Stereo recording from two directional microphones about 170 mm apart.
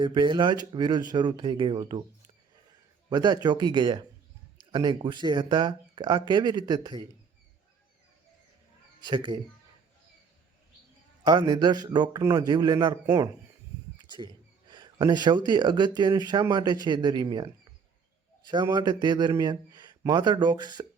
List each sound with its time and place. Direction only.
0.0 s speech: 25° right (ahead or behind)
3.1 s speech: 25° right (ahead or behind)
9.0 s speech: 25° right (ahead or behind)
11.2 s speech: 25° right (ahead or behind)
14.7 s speech: 25° right (ahead or behind)